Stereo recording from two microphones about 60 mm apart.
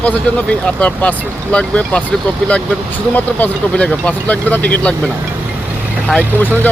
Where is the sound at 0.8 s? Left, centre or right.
Left.